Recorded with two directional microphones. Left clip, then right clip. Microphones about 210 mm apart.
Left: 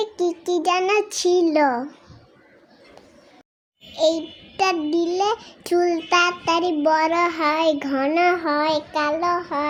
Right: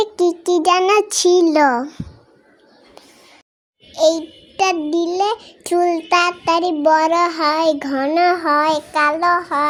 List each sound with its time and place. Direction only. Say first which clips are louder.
0.0 s a child's voice: right 6 dB; 35° right (ahead or behind)
3.9 s a child's voice: right 5 dB; 20° right (ahead or behind)